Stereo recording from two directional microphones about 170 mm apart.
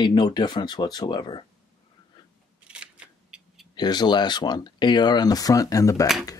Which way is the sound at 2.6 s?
5° right (ahead or behind).